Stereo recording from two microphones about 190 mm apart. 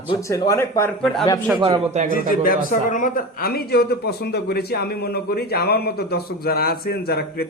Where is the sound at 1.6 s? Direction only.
30° right (ahead or behind).